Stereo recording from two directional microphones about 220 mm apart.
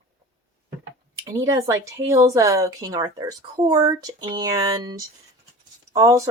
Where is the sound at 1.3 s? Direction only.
15° right (ahead or behind).